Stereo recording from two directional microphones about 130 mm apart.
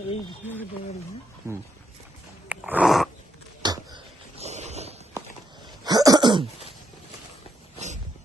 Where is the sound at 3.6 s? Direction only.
35° right (ahead or behind).